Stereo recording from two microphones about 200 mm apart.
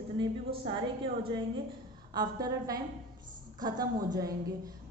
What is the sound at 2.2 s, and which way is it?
A woman's voice, 20° right (ahead or behind).